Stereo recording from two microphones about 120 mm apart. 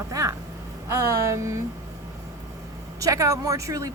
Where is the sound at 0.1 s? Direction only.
25° right (ahead or behind).